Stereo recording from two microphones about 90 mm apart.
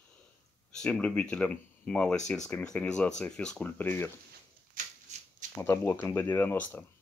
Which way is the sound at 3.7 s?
25° left (ahead or behind).